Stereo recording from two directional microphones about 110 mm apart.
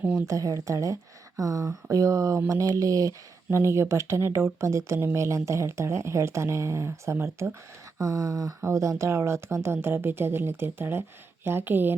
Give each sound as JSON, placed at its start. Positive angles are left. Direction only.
{"t": 0.0, "sound": "speech", "side_deg": -15}
{"t": 0.3, "sound": "speech", "side_deg": -30}